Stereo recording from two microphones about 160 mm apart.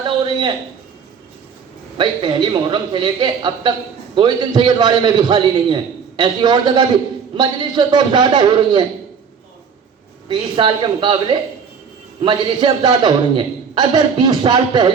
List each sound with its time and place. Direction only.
0.0 s a sound: 30° right (ahead or behind)
2.0 s a man's voice: 25° right (ahead or behind)
10.2 s a man's voice: 30° right (ahead or behind)